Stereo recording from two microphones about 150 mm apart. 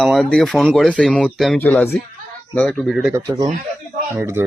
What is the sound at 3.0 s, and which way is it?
Speech, 10° right (ahead or behind).